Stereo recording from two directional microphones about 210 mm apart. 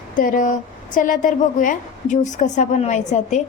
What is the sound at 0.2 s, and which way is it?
A woman's voice, 40° left (ahead or behind).